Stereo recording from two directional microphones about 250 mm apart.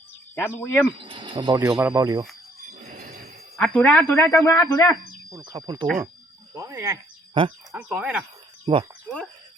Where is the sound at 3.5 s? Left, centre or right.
Centre.